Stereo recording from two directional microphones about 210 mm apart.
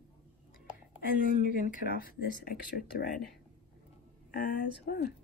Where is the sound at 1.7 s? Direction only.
45° left (ahead or behind).